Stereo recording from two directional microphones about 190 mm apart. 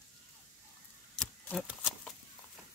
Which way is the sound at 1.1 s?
5° left (ahead or behind).